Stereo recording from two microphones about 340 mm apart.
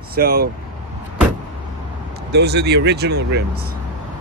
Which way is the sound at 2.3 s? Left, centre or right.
Right.